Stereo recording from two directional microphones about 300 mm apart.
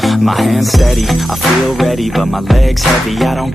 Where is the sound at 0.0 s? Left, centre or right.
Centre.